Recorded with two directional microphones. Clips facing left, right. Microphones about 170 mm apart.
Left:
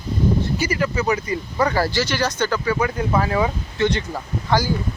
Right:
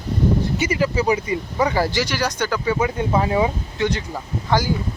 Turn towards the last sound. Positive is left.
turn(degrees=-15)  # may be behind; listen again after turning